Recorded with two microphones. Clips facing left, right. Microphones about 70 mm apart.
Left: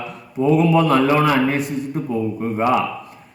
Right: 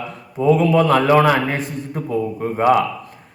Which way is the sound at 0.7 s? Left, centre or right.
Right.